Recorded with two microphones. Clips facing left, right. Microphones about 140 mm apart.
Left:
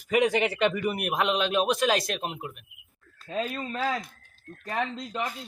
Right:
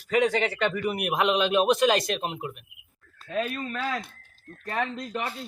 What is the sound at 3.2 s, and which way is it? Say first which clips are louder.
Speech: right 1 dB; 30° left (ahead or behind).